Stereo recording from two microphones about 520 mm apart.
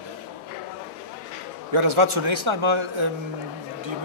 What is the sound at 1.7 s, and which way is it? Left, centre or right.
Speech, right.